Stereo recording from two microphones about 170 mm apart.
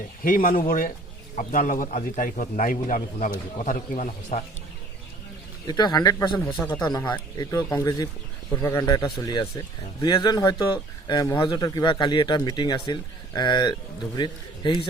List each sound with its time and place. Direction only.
0.3 s a man's voice: 55° left (ahead or behind)
5.6 s speech: 25° left (ahead or behind)